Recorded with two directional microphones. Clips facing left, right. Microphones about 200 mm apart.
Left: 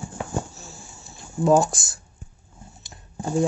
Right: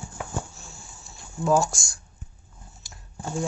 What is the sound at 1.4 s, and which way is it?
Speech, 20° left (ahead or behind).